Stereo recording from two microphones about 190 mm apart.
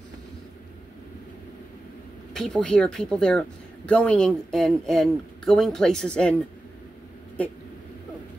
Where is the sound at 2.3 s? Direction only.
Centre (ahead or behind).